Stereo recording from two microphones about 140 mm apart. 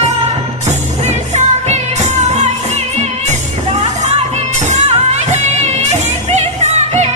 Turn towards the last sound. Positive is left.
turn(degrees=-55)  # may be behind; listen again after turning